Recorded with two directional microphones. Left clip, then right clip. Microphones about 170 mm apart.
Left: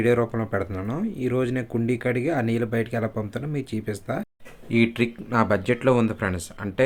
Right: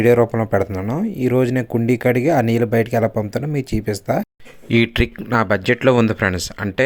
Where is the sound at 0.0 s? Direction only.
40° right (ahead or behind).